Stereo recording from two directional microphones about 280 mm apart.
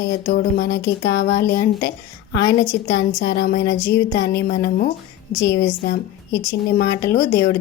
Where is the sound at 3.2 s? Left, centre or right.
Left.